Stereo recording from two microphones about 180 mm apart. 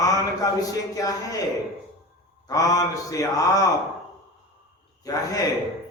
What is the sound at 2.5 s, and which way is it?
Speech, 20° left (ahead or behind).